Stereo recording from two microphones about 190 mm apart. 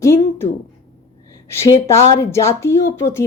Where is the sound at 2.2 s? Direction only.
15° left (ahead or behind).